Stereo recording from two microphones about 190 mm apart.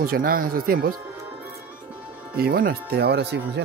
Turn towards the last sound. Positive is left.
turn(degrees=-60)  # may be behind; listen again after turning